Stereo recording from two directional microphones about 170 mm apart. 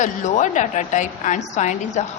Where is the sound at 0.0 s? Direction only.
45° left (ahead or behind).